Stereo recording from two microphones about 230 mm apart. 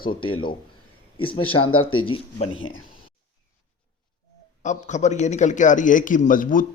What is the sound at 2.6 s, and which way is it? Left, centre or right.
Speech, left.